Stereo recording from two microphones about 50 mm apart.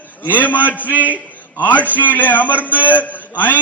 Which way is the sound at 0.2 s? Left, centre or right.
Left.